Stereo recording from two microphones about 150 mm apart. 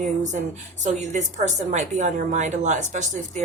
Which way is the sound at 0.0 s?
50° right (ahead or behind).